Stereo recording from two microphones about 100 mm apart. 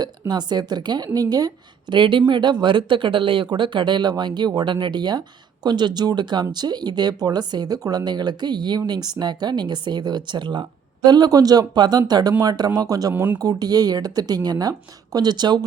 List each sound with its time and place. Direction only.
0.0 s a woman's voice: 45° right (ahead or behind)
13.1 s speech: 20° right (ahead or behind)
13.4 s speech: 40° right (ahead or behind)